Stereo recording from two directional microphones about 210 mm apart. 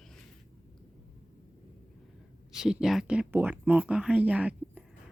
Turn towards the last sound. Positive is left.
turn(degrees=-5)  # may be behind; listen again after turning